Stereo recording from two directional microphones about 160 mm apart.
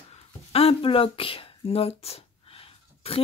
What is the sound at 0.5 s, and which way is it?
Speech, 35° left (ahead or behind).